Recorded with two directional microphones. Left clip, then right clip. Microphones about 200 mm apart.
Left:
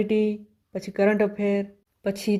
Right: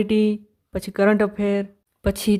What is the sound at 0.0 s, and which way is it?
Speech, 25° right (ahead or behind).